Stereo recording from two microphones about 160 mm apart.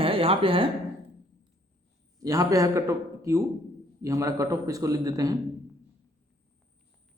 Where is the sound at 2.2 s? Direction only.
20° right (ahead or behind).